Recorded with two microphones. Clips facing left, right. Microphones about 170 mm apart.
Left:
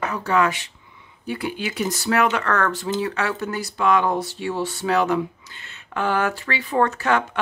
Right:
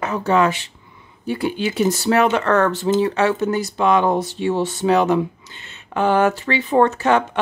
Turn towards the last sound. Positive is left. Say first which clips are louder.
# right 4 dB
turn(degrees=-25)  # may be behind; listen again after turning